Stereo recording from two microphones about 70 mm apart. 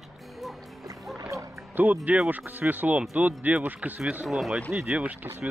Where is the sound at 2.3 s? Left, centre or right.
Right.